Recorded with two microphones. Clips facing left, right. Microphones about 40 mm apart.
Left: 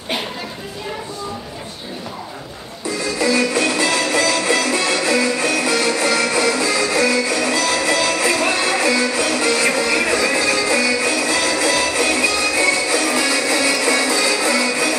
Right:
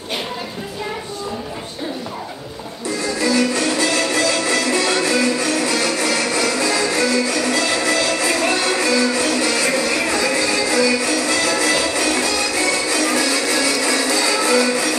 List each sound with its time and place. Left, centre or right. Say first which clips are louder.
3.2 s music: left 1 dB; left